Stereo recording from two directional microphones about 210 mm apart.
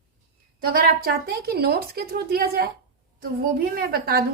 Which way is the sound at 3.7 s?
45° right (ahead or behind).